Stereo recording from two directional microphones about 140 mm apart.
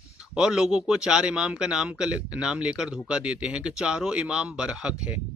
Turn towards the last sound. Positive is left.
turn(degrees=-5)  # may be behind; listen again after turning